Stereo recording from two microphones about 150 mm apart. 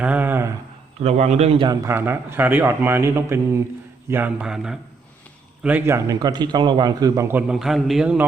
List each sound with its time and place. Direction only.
0.0 s a sound: 10° right (ahead or behind)
1.0 s a man's voice: 50° right (ahead or behind)
1.6 s a man's voice: 20° right (ahead or behind); by 4.8 s 5° right (ahead or behind)
5.6 s a man's voice: 15° right (ahead or behind)